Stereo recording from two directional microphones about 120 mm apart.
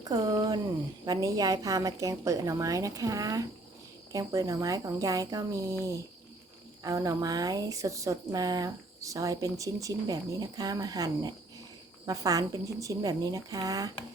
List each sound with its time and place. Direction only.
0.0 s a woman's voice: 30° right (ahead or behind)
6.8 s speech: 30° right (ahead or behind)